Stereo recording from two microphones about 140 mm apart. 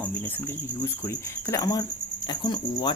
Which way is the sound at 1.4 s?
25° left (ahead or behind).